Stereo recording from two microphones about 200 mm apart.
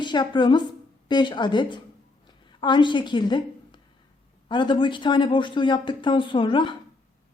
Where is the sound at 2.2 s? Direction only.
25° left (ahead or behind).